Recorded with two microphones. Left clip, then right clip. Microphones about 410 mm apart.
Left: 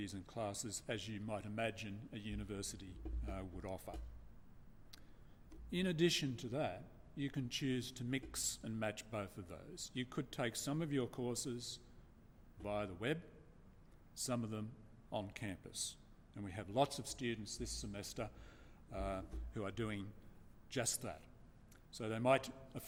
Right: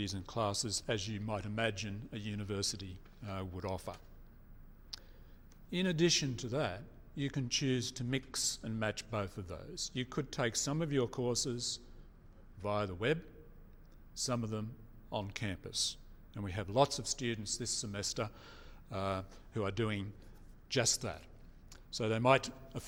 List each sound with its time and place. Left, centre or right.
0.0 s a man's voice: right
4.9 s a sound: right
5.7 s a man's voice: right
14.2 s a man's voice: right